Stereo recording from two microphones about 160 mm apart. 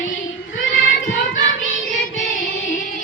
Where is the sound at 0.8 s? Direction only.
55° left (ahead or behind).